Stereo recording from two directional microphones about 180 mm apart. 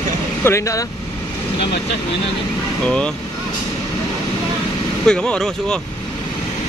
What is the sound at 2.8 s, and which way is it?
Speech, 5° left (ahead or behind).